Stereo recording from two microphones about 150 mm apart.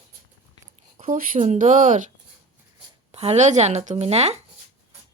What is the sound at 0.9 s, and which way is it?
Speech, 60° right (ahead or behind).